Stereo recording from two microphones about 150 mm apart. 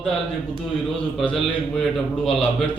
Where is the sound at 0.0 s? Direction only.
5° left (ahead or behind).